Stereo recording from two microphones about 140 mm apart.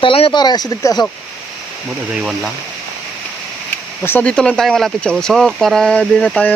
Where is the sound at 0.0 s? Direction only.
40° left (ahead or behind).